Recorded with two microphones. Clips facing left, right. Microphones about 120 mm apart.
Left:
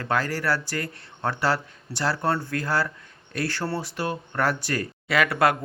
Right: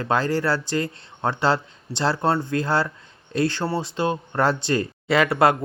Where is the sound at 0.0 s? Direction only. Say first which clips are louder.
Right 4 dB; 25° right (ahead or behind).